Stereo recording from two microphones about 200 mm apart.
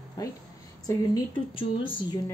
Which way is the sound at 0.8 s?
20° left (ahead or behind).